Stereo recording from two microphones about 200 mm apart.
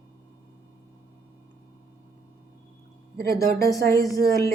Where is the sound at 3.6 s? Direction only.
15° left (ahead or behind).